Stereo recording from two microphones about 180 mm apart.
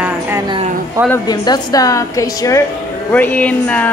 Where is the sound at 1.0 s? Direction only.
15° left (ahead or behind).